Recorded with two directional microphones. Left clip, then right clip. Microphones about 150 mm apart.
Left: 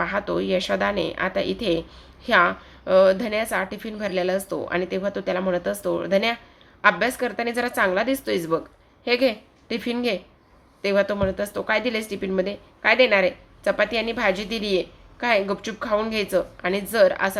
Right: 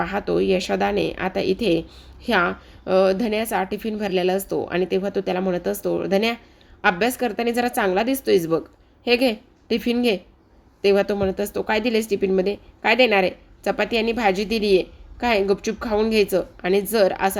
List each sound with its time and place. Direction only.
0.0 s a woman's voice: 50° right (ahead or behind)